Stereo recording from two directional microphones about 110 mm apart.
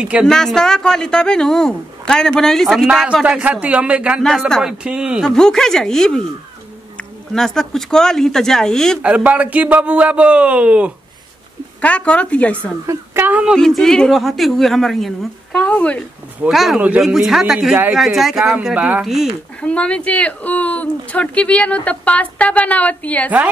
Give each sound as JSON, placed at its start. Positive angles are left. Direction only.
{"t": 0.0, "sound": "speech", "side_deg": -10}
{"t": 0.3, "sound": "a man's voice", "side_deg": 5}
{"t": 4.2, "sound": "a man's voice", "side_deg": 5}
{"t": 5.2, "sound": "a man's voice", "side_deg": 5}
{"t": 9.0, "sound": "speech", "side_deg": -10}
{"t": 11.8, "sound": "speech", "side_deg": 10}
{"t": 12.8, "sound": "a woman's voice", "side_deg": -20}
{"t": 13.6, "sound": "a man's voice", "side_deg": 5}
{"t": 16.3, "sound": "a man's voice", "side_deg": -5}
{"t": 19.0, "sound": "a man's voice", "side_deg": -5}
{"t": 19.6, "sound": "speech", "side_deg": 10}